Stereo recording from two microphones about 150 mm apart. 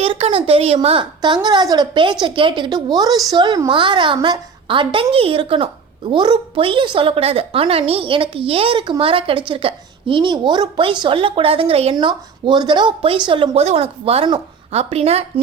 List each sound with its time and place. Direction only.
0.0 s a woman's voice: 40° right (ahead or behind)
11.9 s a woman's voice: 30° right (ahead or behind)